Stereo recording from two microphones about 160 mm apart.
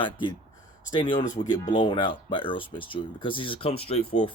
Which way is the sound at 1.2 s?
50° left (ahead or behind).